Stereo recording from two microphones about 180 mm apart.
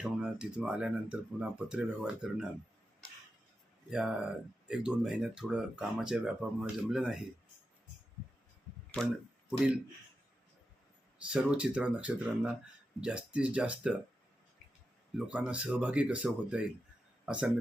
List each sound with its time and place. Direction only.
0.0 s speech: 5° right (ahead or behind)
3.8 s speech: 5° right (ahead or behind)
9.5 s speech: 5° right (ahead or behind)
11.2 s speech: 5° right (ahead or behind)
15.3 s speech: 5° right (ahead or behind)